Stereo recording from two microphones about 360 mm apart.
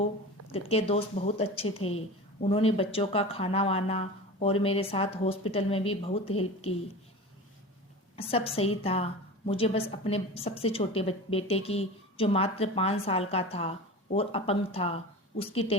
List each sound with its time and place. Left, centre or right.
0.5 s a woman's voice: centre
8.1 s a woman's voice: centre